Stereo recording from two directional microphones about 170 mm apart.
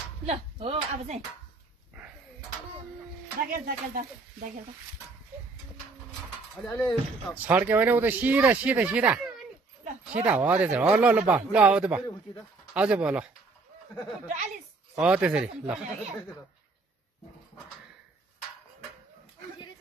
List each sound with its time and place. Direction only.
0.3 s speech: 35° right (ahead or behind)
3.5 s speech: 60° right (ahead or behind)
6.5 s speech: 10° left (ahead or behind)
7.4 s speech: 10° right (ahead or behind)
14.2 s speech: 45° right (ahead or behind)
15.0 s speech: 5° right (ahead or behind)